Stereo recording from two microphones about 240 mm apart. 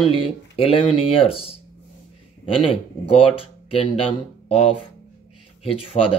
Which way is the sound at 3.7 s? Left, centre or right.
Left.